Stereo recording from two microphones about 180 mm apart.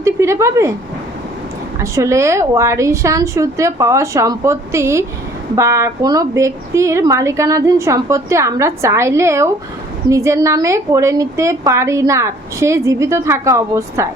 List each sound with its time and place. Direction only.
0.0 s a woman's voice: 15° right (ahead or behind)
1.8 s a woman's voice: 15° right (ahead or behind)